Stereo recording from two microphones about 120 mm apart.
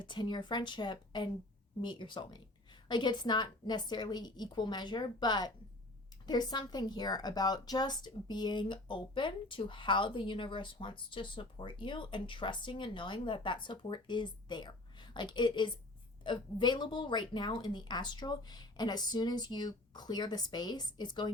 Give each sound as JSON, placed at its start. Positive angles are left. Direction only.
{"t": 0.0, "sound": "a woman's voice", "side_deg": 40}